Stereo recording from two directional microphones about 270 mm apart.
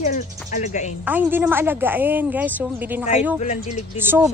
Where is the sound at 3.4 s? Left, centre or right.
Left.